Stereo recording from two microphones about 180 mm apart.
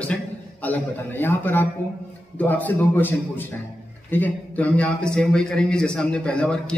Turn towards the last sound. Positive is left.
turn(degrees=5)  # may be behind; listen again after turning